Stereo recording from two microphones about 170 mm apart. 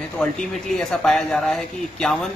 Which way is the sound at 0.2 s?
5° left (ahead or behind).